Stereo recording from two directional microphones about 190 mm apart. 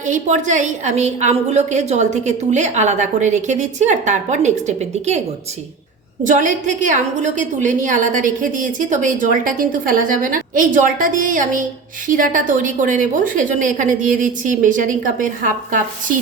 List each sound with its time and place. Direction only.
0.0 s a woman's voice: 40° right (ahead or behind)
6.2 s a woman's voice: 45° right (ahead or behind)